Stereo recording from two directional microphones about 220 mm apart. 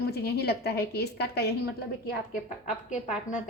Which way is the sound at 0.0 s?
45° left (ahead or behind).